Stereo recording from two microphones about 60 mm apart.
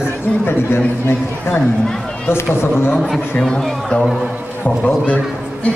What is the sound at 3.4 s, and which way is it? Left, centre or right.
Speech, centre.